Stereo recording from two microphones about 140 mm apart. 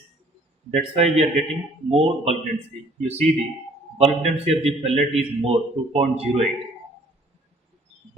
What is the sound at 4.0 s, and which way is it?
A man's voice, 50° right (ahead or behind).